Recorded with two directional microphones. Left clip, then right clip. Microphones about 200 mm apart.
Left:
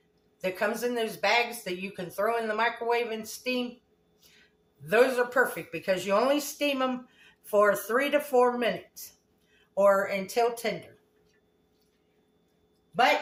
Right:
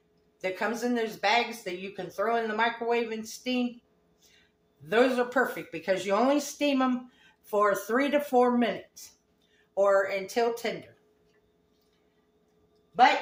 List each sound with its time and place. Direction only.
0.4 s speech: 15° right (ahead or behind)
4.9 s speech: 15° right (ahead or behind)
9.7 s speech: 15° right (ahead or behind)